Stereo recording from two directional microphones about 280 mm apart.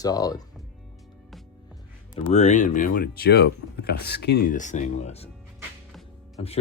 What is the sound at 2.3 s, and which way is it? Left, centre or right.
Speech, left.